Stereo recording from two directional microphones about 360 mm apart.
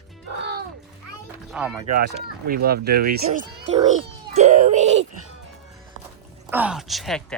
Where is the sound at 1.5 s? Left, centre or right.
Centre.